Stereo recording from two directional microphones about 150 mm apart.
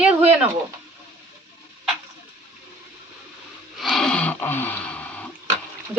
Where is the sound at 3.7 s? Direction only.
Centre (ahead or behind).